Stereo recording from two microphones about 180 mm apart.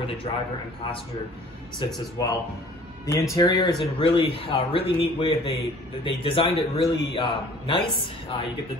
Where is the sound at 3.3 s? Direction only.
20° left (ahead or behind).